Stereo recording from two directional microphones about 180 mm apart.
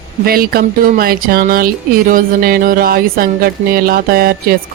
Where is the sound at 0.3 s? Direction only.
55° right (ahead or behind).